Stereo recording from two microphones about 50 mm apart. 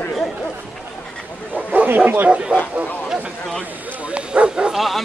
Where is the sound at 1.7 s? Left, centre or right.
Right.